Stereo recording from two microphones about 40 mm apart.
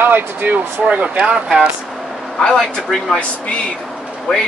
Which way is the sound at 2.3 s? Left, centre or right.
Centre.